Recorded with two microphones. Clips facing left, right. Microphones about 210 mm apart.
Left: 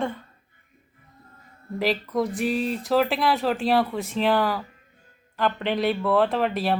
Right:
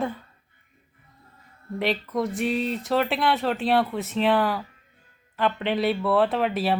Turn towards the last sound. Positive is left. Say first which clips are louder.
# even
turn(degrees=0)  # may be behind; listen again after turning